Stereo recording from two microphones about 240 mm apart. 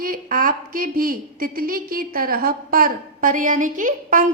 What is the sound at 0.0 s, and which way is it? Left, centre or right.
A woman's voice, right.